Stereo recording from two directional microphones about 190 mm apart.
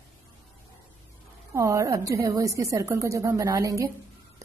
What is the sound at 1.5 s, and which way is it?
A woman's voice, 15° right (ahead or behind).